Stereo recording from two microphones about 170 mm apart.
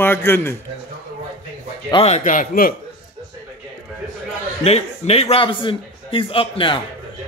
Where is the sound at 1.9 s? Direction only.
35° left (ahead or behind); by 2.7 s 55° left (ahead or behind).